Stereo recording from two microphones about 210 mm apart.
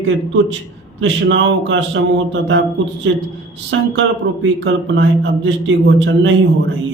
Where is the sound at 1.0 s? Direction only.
60° right (ahead or behind).